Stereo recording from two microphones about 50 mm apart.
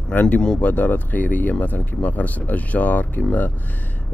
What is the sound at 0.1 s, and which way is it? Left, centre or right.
Speech, left.